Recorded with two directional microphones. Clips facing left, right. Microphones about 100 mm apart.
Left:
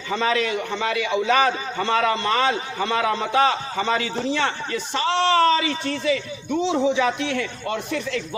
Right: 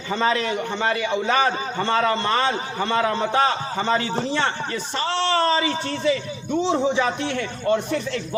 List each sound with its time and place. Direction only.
0.1 s a man's voice: 35° right (ahead or behind)